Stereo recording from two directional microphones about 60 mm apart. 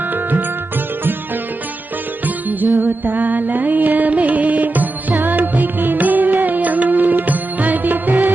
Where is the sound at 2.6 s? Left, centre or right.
Right.